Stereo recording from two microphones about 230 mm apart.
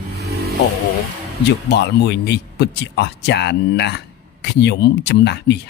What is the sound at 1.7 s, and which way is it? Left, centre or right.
Speech, left.